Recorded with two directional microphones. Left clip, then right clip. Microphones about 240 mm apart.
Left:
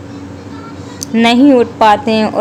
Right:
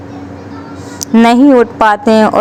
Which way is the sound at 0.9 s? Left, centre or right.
Right.